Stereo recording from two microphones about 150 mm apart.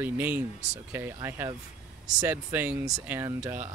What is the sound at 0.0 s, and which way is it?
Speech, 15° right (ahead or behind).